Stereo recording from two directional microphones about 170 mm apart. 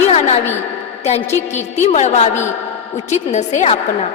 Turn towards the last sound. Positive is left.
turn(degrees=40)  # may be behind; listen again after turning